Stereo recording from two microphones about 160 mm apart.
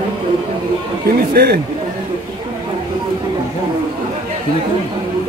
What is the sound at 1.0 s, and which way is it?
Speech, 75° right (ahead or behind).